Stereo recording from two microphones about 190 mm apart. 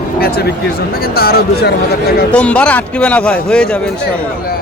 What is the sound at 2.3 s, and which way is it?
A man's voice, 5° left (ahead or behind).